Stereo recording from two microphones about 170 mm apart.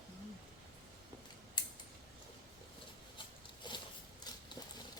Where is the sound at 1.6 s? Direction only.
25° left (ahead or behind).